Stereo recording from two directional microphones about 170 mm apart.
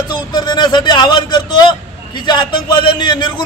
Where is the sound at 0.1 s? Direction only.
25° left (ahead or behind).